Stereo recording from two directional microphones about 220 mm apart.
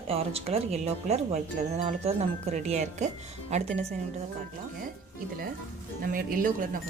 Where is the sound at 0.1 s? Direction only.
25° right (ahead or behind).